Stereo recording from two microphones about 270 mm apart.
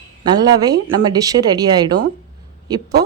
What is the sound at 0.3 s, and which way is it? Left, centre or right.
Speech, centre.